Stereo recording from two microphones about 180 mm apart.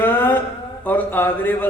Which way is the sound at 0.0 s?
10° left (ahead or behind).